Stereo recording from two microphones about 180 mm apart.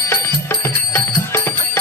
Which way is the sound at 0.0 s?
15° left (ahead or behind).